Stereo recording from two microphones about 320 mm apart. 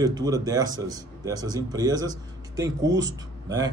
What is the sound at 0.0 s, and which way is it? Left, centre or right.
Speech, centre.